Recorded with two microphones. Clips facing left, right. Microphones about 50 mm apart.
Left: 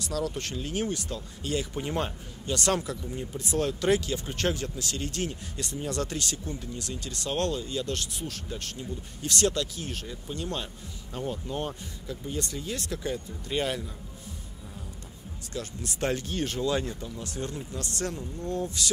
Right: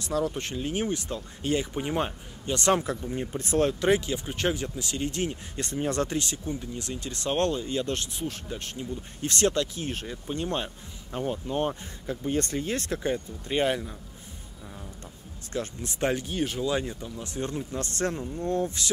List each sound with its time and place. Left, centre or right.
0.0 s speech: right
3.8 s speech: right
5.6 s speech: right
15.5 s speech: right
16.0 s speech: centre; by 18.9 s right